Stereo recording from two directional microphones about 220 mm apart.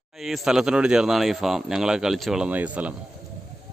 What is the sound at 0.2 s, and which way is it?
Speech, centre (ahead or behind).